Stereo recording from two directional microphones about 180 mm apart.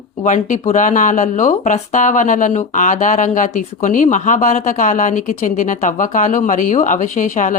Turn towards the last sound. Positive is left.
turn(degrees=45)  # may be behind; listen again after turning